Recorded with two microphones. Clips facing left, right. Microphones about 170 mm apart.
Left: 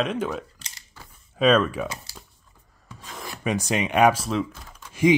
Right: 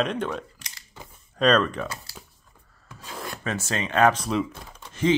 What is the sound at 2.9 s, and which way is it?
Rub, 5° right (ahead or behind).